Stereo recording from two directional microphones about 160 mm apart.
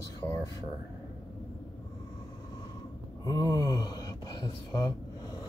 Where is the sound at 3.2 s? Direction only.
20° left (ahead or behind).